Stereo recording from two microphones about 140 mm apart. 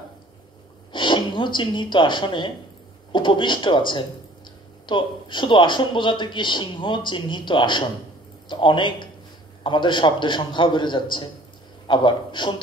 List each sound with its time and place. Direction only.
0.9 s speech: 35° left (ahead or behind)